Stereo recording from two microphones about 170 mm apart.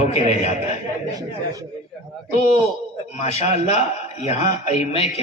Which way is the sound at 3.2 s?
40° left (ahead or behind).